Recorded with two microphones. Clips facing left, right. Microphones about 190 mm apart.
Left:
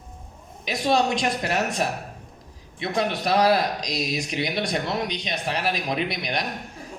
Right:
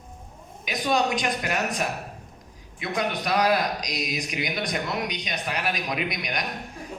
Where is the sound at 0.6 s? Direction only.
30° left (ahead or behind).